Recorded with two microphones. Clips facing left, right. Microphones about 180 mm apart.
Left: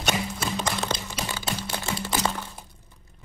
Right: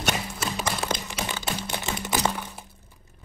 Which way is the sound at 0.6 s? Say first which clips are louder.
Right 1 dB; 10° right (ahead or behind).